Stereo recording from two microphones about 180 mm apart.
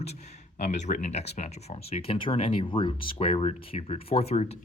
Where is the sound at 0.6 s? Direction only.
40° left (ahead or behind).